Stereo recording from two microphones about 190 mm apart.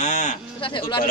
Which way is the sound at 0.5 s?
25° left (ahead or behind).